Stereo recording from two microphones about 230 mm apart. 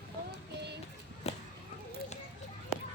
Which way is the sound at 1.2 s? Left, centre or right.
Left.